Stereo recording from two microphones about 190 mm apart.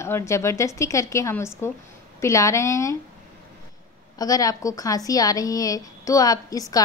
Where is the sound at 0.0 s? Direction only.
15° left (ahead or behind).